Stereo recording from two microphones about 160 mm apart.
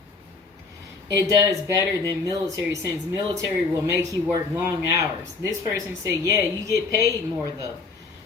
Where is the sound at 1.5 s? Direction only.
20° right (ahead or behind).